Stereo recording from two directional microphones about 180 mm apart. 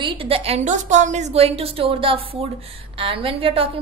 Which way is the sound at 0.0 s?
30° right (ahead or behind).